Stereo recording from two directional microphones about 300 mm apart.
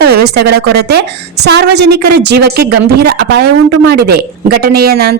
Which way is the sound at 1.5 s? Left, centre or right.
Right.